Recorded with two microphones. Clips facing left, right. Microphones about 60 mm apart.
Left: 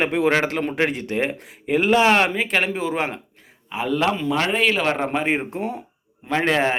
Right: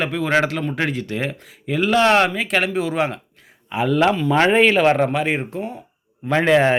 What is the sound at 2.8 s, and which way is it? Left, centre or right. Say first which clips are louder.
Speech: right 3 dB; centre.